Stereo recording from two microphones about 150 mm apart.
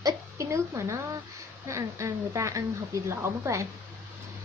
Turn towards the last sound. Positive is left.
turn(degrees=-20)  # may be behind; listen again after turning